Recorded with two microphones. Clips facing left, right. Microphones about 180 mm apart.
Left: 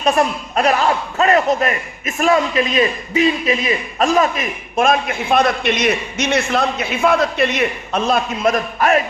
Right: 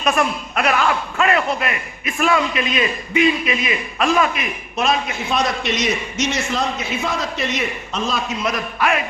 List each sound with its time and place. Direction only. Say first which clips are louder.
0.0 s a man's voice: left 3 dB; 30° left (ahead or behind)